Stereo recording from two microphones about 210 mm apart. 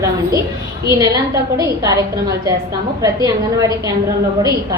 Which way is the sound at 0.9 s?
15° right (ahead or behind).